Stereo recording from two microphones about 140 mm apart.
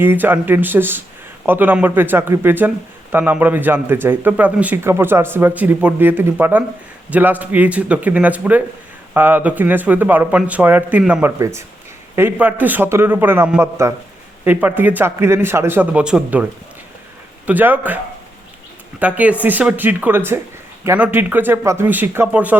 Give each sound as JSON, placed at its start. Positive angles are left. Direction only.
{"t": 0.0, "sound": "speech", "side_deg": -15}
{"t": 11.3, "sound": "speech", "side_deg": -20}